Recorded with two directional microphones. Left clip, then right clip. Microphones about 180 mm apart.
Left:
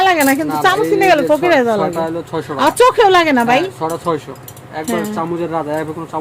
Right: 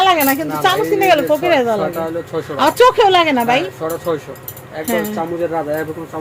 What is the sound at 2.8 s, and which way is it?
Speech, 25° left (ahead or behind).